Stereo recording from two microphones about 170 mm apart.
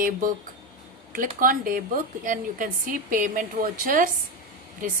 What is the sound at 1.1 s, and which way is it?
A woman's voice, 55° right (ahead or behind).